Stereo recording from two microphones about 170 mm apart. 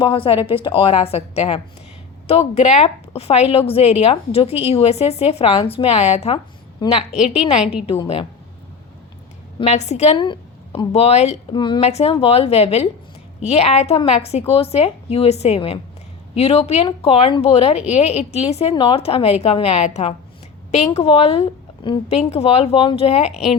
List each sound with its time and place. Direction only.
0.0 s a woman's voice: 30° left (ahead or behind)
6.8 s a woman's voice: 25° left (ahead or behind)
7.6 s a woman's voice: 5° right (ahead or behind)
8.0 s a woman's voice: 35° left (ahead or behind)
9.6 s a woman's voice: 40° left (ahead or behind)
11.5 s a woman's voice: 25° left (ahead or behind)
11.9 s a woman's voice: 40° left (ahead or behind)